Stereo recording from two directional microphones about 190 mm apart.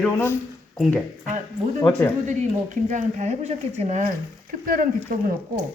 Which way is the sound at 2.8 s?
40° right (ahead or behind).